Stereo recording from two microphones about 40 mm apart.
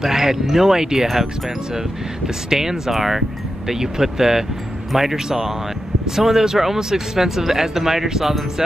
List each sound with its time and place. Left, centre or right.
0.0 s speech: centre